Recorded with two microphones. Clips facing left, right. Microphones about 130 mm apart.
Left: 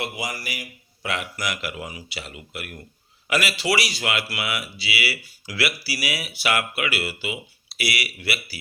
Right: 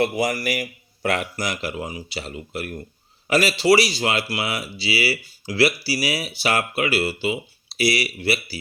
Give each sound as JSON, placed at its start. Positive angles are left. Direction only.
{"t": 0.0, "sound": "speech", "side_deg": -50}
{"t": 1.4, "sound": "speech", "side_deg": -30}